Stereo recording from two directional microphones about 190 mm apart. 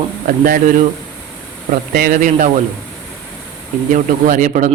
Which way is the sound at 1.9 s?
50° right (ahead or behind).